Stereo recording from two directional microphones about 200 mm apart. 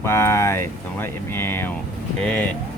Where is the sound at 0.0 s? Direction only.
15° left (ahead or behind).